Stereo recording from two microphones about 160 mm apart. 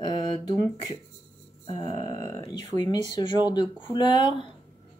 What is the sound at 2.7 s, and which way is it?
Speech, 30° left (ahead or behind).